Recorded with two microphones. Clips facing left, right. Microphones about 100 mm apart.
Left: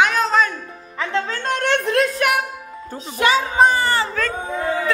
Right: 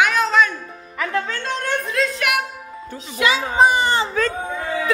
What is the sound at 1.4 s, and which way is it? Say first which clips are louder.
Speech: left 4 dB; 65° left (ahead or behind).